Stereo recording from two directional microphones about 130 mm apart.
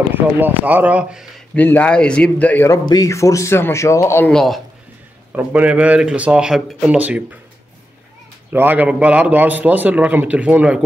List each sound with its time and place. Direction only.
0.1 s a man's voice: 15° right (ahead or behind)
1.5 s speech: 10° left (ahead or behind)
2.9 s speech: 25° left (ahead or behind)
4.3 s a man's voice: 5° left (ahead or behind)
5.3 s a man's voice: 10° right (ahead or behind)
8.5 s a man's voice: 15° right (ahead or behind)